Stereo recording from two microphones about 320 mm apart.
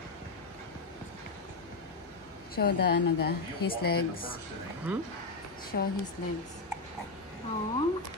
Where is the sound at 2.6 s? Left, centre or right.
Left.